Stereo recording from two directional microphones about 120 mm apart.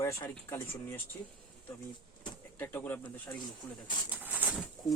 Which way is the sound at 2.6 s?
20° left (ahead or behind).